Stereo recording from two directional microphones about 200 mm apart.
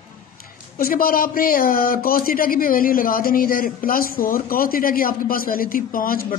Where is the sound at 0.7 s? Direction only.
45° left (ahead or behind).